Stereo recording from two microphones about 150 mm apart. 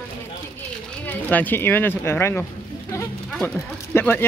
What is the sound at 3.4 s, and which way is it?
Speech, 15° left (ahead or behind).